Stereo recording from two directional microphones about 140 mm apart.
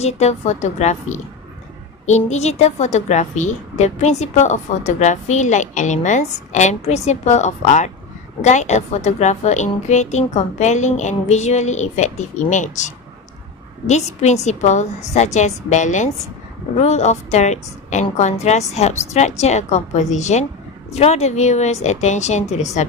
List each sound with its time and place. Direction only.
0.0 s a woman's voice: 50° left (ahead or behind)